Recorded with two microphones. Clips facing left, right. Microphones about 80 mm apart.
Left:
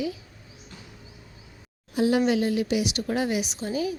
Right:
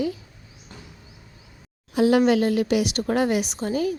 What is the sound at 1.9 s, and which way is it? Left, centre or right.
Speech, right.